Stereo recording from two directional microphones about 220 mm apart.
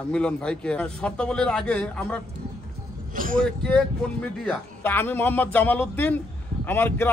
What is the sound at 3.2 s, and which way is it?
Speech, 40° right (ahead or behind).